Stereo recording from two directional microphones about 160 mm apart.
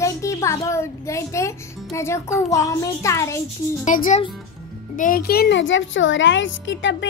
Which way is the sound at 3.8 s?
55° left (ahead or behind).